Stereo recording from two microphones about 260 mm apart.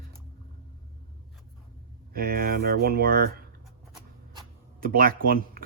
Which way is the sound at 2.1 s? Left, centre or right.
Right.